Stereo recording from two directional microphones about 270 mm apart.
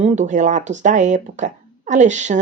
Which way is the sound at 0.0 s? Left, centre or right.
Right.